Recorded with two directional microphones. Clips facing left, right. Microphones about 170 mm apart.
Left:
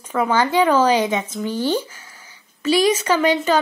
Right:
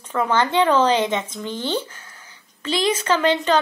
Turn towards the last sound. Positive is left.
turn(degrees=10)  # may be behind; listen again after turning